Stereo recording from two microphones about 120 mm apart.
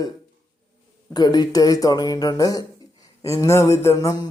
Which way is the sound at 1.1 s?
35° left (ahead or behind).